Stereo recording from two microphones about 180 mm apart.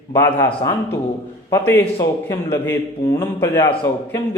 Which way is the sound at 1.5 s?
15° left (ahead or behind).